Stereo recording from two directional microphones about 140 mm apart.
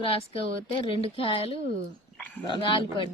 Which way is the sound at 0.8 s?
40° left (ahead or behind).